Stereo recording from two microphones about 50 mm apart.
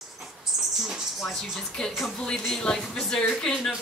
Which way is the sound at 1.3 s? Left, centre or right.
Centre.